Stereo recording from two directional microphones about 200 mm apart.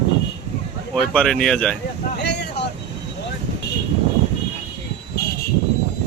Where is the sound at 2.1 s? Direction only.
55° left (ahead or behind).